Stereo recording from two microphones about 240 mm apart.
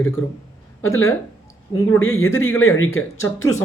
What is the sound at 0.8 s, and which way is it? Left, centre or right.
Speech, left.